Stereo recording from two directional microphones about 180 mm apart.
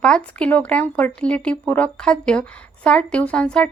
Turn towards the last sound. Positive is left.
turn(degrees=5)  # may be behind; listen again after turning